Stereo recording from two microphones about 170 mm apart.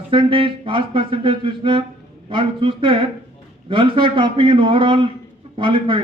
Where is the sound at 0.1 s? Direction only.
30° right (ahead or behind).